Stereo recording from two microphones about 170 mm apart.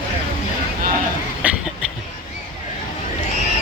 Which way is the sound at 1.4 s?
10° right (ahead or behind).